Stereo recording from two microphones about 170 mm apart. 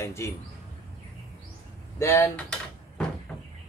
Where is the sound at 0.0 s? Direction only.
15° left (ahead or behind).